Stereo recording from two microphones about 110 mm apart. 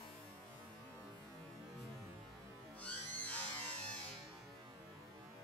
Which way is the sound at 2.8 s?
15° left (ahead or behind).